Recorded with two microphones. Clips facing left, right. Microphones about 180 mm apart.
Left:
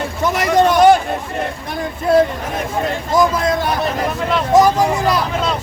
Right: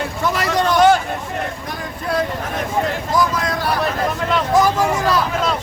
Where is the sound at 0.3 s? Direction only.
15° left (ahead or behind).